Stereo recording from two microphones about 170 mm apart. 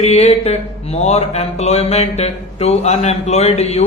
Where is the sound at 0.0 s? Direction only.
40° left (ahead or behind).